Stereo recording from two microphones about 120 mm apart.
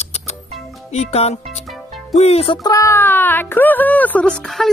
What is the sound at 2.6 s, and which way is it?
Speech, 25° left (ahead or behind).